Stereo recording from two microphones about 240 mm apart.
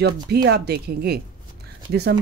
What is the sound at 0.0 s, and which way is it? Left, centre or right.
Speech, right.